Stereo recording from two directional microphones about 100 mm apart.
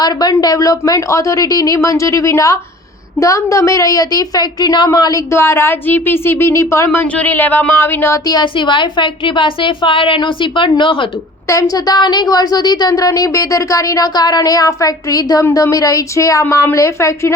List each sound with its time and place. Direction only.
0.0 s a woman's voice: 40° left (ahead or behind)
5.3 s a woman's voice: 25° left (ahead or behind)
8.3 s a woman's voice: 50° left (ahead or behind)
11.4 s a woman's voice: 35° left (ahead or behind)